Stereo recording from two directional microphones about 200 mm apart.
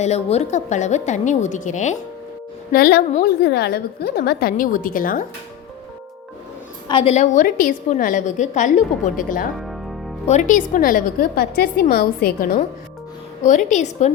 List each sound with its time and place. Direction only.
0.0 s a woman's voice: 30° left (ahead or behind)
2.7 s a woman's voice: 50° left (ahead or behind)
6.8 s a woman's voice: 25° left (ahead or behind)